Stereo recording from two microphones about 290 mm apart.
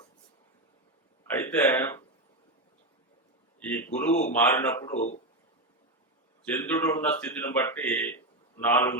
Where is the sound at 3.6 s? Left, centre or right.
Centre.